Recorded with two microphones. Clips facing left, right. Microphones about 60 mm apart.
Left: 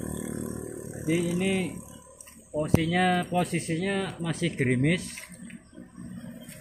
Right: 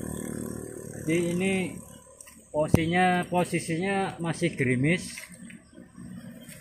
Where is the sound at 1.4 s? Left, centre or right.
Right.